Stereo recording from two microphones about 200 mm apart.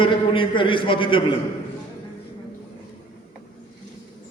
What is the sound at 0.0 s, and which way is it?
A man's voice, 25° left (ahead or behind).